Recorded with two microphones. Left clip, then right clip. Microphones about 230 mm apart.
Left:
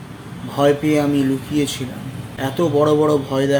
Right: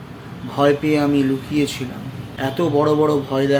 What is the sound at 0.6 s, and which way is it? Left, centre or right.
Speech, centre.